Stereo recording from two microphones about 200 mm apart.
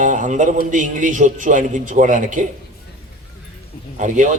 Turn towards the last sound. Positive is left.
turn(degrees=-35)  # may be behind; listen again after turning